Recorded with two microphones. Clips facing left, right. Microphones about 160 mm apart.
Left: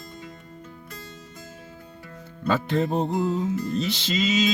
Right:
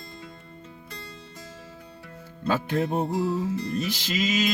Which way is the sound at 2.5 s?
10° right (ahead or behind).